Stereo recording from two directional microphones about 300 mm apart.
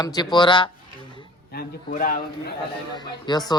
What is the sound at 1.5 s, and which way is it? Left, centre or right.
Speech, left.